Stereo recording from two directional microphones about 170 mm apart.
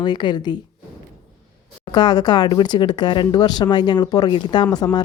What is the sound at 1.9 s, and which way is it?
Speech, 25° left (ahead or behind).